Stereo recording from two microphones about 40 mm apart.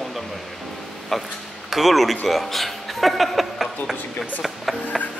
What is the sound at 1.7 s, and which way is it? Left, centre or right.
Speech, centre.